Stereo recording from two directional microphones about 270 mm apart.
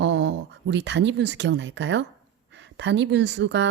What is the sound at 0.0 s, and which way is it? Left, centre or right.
Speech, right.